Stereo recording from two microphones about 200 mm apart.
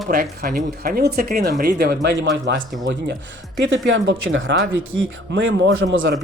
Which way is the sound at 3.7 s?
70° right (ahead or behind).